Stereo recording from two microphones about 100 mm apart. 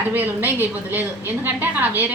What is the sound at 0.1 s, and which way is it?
A woman's voice, 20° right (ahead or behind).